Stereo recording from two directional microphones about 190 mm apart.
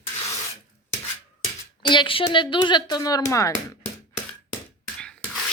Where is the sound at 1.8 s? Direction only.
25° left (ahead or behind).